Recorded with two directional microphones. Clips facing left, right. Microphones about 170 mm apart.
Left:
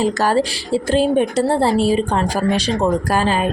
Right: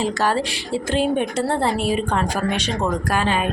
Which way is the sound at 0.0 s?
40° left (ahead or behind).